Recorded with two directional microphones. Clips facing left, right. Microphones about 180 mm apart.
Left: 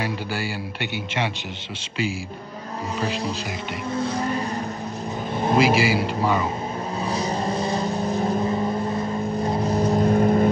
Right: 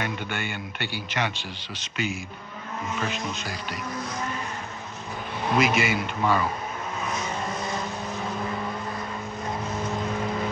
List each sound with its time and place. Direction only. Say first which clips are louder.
0.0 s a man's voice: left 3 dB; 30° left (ahead or behind)
3.0 s a man's voice: left 6 dB; 35° left (ahead or behind)
5.6 s a man's voice: left 4 dB; 30° left (ahead or behind)
7.1 s vehicle: left 7 dB; 35° left (ahead or behind)